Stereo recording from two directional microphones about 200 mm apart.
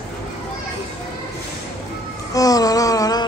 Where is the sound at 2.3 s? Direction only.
15° left (ahead or behind).